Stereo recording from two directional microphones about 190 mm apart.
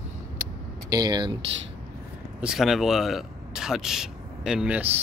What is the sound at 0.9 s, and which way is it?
Speech, 20° right (ahead or behind).